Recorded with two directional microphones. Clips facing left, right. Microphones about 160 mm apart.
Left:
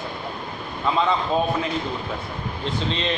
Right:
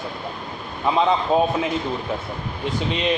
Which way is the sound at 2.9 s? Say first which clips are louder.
Right 4 dB; 15° right (ahead or behind).